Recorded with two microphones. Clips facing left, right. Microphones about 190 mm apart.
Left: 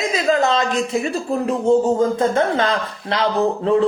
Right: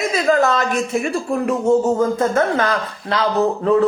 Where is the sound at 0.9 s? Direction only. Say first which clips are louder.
Right 1 dB; 25° left (ahead or behind).